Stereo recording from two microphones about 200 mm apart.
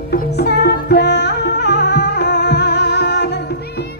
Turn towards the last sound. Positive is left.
turn(degrees=60)  # may be behind; listen again after turning